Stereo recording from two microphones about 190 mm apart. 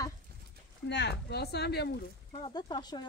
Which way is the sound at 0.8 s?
65° left (ahead or behind).